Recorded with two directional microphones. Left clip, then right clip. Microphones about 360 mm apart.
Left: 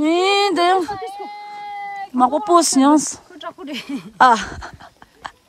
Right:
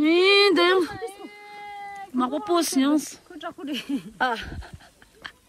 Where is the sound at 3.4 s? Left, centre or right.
Left.